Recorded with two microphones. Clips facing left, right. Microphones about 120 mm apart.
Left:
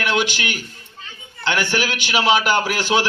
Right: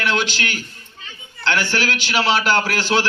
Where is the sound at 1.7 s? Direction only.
15° left (ahead or behind).